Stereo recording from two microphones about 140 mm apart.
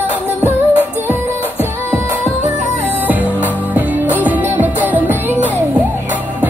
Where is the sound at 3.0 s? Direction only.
10° right (ahead or behind).